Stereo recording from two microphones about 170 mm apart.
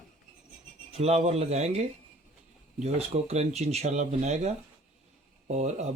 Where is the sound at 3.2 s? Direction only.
40° right (ahead or behind).